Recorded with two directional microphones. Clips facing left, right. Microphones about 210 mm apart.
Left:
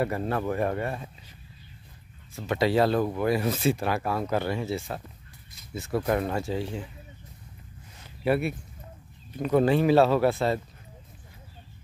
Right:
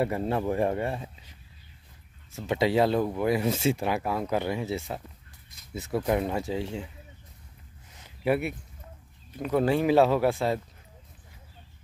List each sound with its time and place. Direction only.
0.0 s speech: 20° right (ahead or behind)
2.3 s speech: 25° right (ahead or behind)
5.9 s speech: 5° right (ahead or behind); by 6.9 s 20° right (ahead or behind)
8.2 s speech: 15° right (ahead or behind)
9.4 s speech: 5° right (ahead or behind)